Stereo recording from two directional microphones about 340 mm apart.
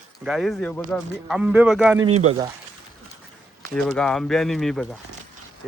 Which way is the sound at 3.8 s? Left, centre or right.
Centre.